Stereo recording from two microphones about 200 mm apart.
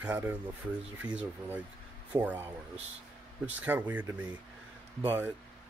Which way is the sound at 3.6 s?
10° right (ahead or behind).